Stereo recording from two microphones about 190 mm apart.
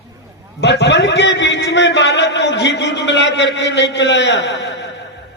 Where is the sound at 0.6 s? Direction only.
65° left (ahead or behind).